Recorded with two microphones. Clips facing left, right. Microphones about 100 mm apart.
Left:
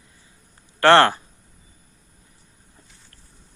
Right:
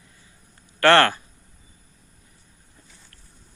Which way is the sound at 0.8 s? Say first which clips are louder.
Left 2 dB; 25° left (ahead or behind).